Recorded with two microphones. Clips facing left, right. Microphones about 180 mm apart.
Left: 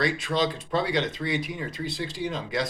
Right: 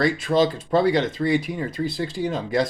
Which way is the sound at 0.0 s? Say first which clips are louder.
Right 6 dB; 45° right (ahead or behind).